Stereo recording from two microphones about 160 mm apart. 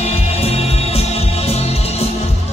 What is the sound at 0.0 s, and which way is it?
Music, 40° left (ahead or behind).